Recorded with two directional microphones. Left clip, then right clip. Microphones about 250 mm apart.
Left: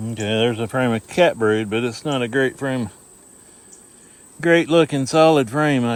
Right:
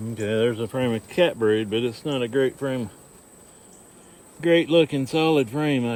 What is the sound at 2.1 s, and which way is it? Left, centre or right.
Speech, left.